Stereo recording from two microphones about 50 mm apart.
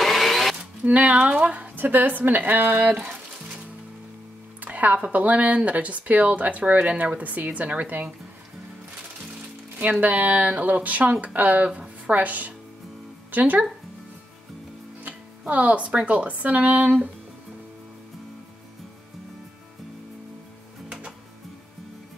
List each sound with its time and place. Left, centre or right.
0.0 s a sound: centre
0.8 s a woman's voice: right
1.8 s speech: right
2.9 s music: right
4.6 s a woman's voice: right
9.8 s speech: right
15.0 s speech: right